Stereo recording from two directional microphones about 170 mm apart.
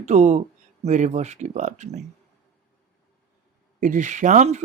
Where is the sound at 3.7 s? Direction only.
50° right (ahead or behind).